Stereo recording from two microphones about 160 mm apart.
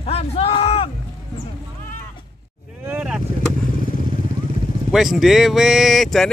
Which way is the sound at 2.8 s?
10° right (ahead or behind).